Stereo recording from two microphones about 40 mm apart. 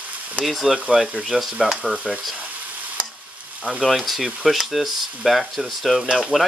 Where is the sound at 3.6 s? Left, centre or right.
Centre.